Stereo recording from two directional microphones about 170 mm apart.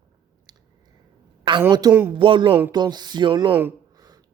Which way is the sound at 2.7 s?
25° right (ahead or behind).